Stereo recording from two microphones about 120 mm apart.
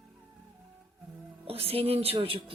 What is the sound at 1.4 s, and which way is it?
Speech, 55° right (ahead or behind).